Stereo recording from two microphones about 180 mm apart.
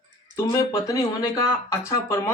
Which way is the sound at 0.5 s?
15° left (ahead or behind).